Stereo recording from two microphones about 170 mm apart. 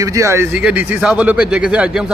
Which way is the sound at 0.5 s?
5° right (ahead or behind).